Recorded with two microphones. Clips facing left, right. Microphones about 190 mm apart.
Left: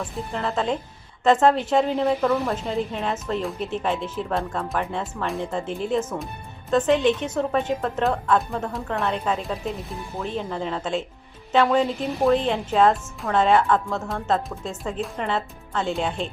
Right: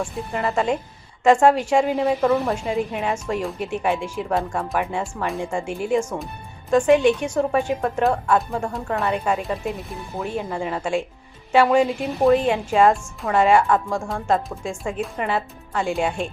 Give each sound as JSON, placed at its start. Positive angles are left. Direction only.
{"t": 0.1, "sound": "a woman's voice", "side_deg": -10}
{"t": 2.6, "sound": "a woman's voice", "side_deg": -15}